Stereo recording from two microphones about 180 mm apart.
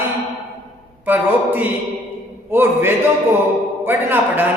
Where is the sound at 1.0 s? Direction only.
10° right (ahead or behind).